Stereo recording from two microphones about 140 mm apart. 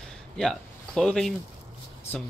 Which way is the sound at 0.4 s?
Centre (ahead or behind).